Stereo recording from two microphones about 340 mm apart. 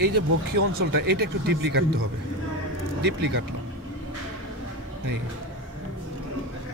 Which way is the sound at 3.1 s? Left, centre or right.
Right.